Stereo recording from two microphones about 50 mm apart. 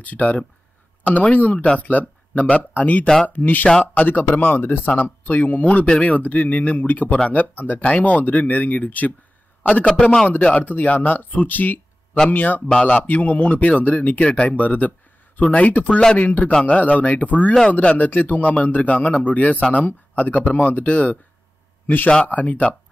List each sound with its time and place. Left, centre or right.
0.0 s speech: left
5.9 s speech: left
9.6 s a sound: left
10.2 s a man's voice: left